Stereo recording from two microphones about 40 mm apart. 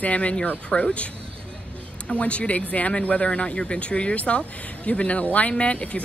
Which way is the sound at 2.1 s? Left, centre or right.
Left.